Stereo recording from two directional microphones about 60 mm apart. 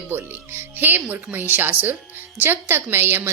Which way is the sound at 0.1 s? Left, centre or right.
Right.